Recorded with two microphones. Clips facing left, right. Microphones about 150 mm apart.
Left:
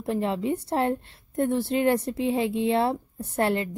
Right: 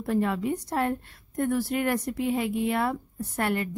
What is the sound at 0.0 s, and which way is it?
Speech, 25° left (ahead or behind).